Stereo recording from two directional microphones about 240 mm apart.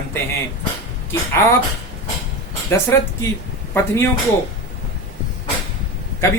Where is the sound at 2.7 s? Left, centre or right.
Centre.